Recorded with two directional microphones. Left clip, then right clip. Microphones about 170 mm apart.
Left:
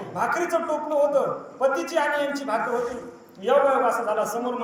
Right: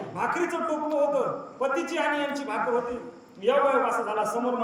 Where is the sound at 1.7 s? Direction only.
20° right (ahead or behind).